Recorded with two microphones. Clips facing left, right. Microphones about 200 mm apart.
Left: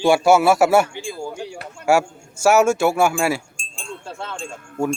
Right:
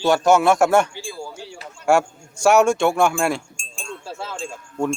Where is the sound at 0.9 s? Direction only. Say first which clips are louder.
Left 4 dB; 20° left (ahead or behind).